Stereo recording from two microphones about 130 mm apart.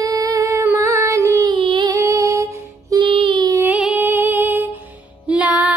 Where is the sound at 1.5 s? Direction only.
40° right (ahead or behind).